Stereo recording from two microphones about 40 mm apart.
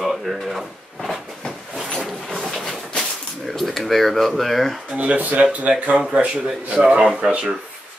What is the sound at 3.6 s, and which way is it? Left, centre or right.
Speech, centre.